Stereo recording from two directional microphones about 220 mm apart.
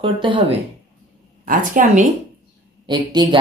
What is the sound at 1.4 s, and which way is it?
Speech, 40° right (ahead or behind).